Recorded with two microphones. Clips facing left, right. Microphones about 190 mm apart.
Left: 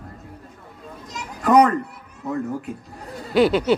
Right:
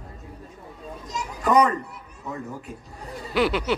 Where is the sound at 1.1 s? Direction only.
60° left (ahead or behind).